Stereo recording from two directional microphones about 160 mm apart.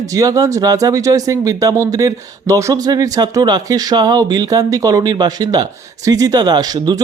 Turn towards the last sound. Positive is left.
turn(degrees=-25)  # may be behind; listen again after turning